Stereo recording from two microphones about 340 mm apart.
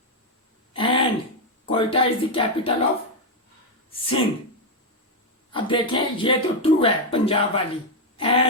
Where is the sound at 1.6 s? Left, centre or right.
Centre.